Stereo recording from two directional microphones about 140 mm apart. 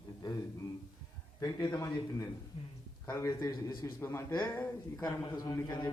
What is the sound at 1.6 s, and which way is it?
A man's voice, 20° left (ahead or behind).